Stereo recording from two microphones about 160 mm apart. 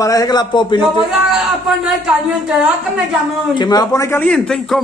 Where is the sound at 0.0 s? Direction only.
20° left (ahead or behind).